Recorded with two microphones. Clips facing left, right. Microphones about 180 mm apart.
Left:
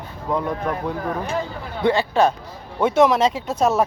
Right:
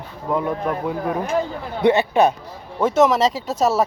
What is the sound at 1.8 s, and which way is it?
Speech, 20° right (ahead or behind).